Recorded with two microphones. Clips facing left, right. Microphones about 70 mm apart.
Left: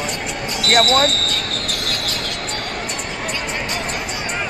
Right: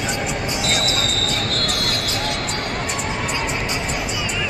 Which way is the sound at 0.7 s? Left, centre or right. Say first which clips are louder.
Left 7 dB; left.